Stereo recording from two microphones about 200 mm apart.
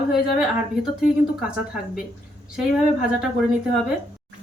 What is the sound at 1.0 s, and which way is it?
Speech, 5° right (ahead or behind).